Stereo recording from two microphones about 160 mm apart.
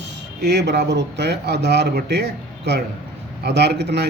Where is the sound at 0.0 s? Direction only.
90° right.